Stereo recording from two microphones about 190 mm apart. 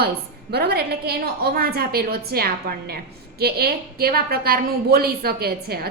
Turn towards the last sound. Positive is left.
turn(degrees=-55)  # may be behind; listen again after turning